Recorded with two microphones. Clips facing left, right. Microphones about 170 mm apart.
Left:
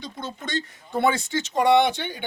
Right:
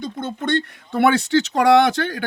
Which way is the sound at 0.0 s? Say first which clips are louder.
Right 8 dB; 50° right (ahead or behind).